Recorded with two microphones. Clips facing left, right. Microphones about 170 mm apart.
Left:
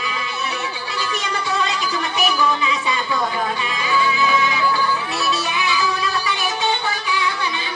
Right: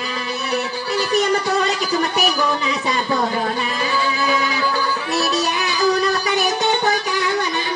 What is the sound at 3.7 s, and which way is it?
Music, 40° right (ahead or behind).